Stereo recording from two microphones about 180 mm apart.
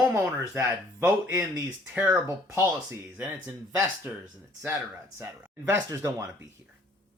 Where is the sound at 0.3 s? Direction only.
10° right (ahead or behind).